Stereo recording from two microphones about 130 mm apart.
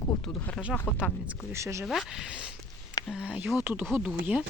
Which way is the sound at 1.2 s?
20° right (ahead or behind).